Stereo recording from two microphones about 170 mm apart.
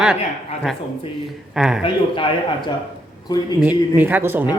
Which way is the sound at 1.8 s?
30° left (ahead or behind).